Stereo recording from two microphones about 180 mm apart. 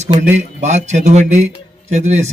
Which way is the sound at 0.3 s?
40° right (ahead or behind).